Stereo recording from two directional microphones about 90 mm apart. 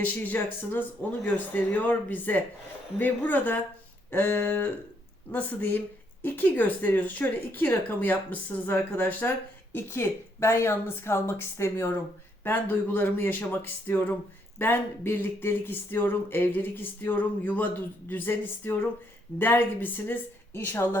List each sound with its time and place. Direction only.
0.0 s speech: 20° left (ahead or behind)